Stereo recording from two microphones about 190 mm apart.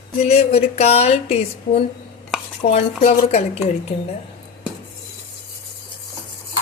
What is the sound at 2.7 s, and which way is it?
Speech, 35° left (ahead or behind).